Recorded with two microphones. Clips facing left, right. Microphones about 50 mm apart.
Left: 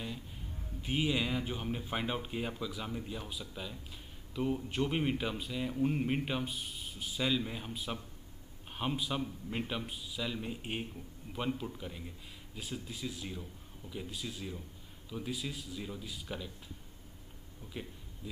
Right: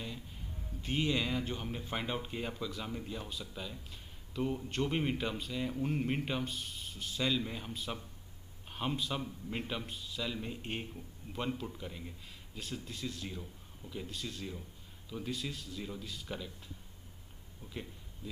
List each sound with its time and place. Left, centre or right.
0.8 s a man's voice: centre